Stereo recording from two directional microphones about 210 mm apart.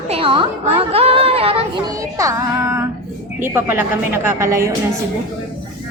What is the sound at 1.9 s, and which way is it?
Speech, 15° right (ahead or behind).